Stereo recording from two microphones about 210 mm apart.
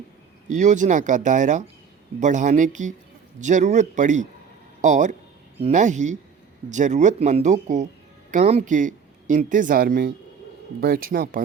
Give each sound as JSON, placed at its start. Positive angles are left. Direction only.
{"t": 0.4, "sound": "speech", "side_deg": -35}